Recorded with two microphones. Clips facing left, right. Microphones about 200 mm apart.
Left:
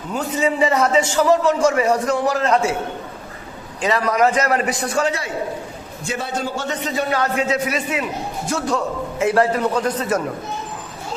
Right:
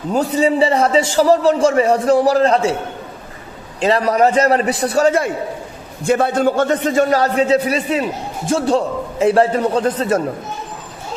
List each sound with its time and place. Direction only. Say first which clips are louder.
0.1 s speech: right 5 dB; 35° right (ahead or behind)
3.8 s speech: right 4 dB; 35° right (ahead or behind)